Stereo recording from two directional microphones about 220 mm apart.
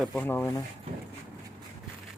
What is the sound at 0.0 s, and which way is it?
Speech, 5° left (ahead or behind).